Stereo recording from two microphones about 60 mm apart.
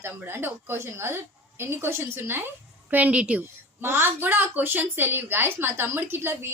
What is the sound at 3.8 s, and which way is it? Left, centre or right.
A woman's voice, right.